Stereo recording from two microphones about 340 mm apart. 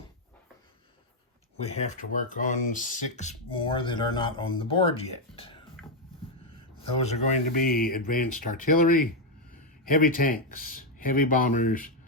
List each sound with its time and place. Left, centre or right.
1.5 s speech: centre
7.0 s speech: left